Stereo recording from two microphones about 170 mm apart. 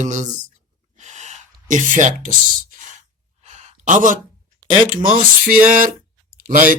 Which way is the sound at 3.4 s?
40° right (ahead or behind).